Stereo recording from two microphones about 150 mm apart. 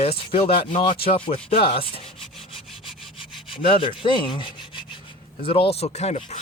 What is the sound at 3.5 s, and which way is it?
Rub, 35° left (ahead or behind).